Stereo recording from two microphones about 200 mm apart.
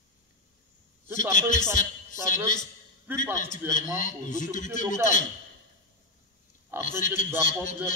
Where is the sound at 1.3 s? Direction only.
40° left (ahead or behind).